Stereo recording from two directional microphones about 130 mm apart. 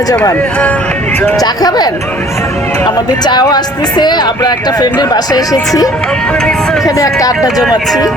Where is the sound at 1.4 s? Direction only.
30° left (ahead or behind).